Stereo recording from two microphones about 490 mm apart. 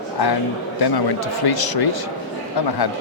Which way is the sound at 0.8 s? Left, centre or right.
Left.